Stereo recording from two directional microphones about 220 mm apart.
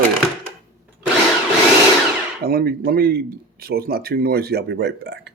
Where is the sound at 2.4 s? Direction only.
45° right (ahead or behind).